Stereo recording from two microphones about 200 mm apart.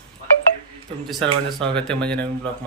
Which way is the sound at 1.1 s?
Centre (ahead or behind).